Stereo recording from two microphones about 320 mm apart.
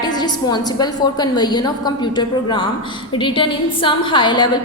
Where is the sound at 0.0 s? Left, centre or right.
Centre.